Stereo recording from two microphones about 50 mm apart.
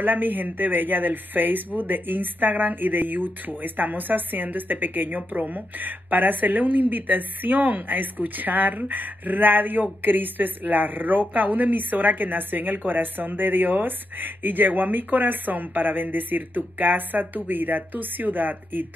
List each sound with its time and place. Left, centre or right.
0.0 s speech: right